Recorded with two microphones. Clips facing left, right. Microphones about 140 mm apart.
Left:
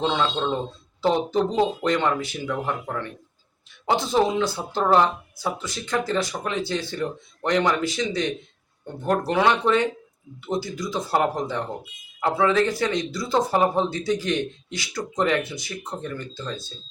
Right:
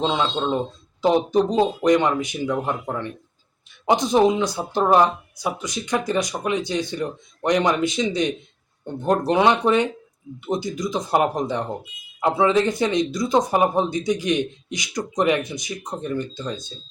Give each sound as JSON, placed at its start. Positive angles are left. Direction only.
{"t": 0.0, "sound": "speech", "side_deg": -15}